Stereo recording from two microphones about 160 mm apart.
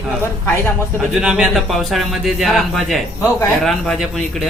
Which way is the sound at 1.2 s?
5° right (ahead or behind).